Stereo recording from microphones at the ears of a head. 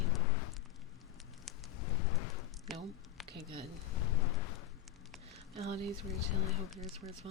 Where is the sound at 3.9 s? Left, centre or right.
Left.